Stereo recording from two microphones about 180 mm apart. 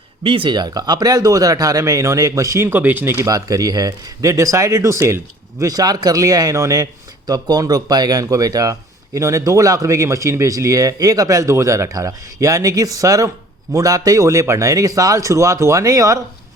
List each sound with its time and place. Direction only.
0.2 s speech: 30° right (ahead or behind)